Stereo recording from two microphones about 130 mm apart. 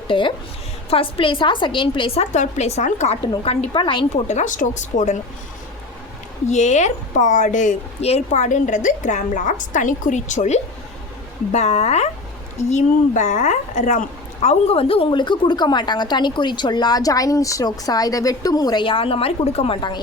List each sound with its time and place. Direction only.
0.1 s a woman's voice: 40° left (ahead or behind)
2.3 s a woman's voice: 65° left (ahead or behind)
3.4 s a woman's voice: 50° left (ahead or behind)
4.3 s a woman's voice: 70° left (ahead or behind)
6.5 s a woman's voice: 65° left (ahead or behind)
8.0 s a woman's voice: 60° left (ahead or behind)
11.5 s a woman's voice: 55° left (ahead or behind)
12.7 s a woman's voice: 70° left (ahead or behind)
14.4 s a woman's voice: 50° left (ahead or behind)